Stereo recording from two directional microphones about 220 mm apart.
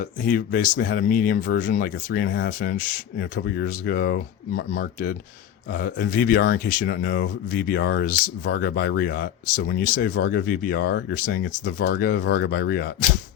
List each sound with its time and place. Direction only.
0.0 s speech: 40° left (ahead or behind)